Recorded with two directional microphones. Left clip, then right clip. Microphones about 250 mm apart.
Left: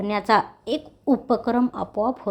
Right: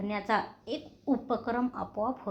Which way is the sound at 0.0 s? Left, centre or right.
Left.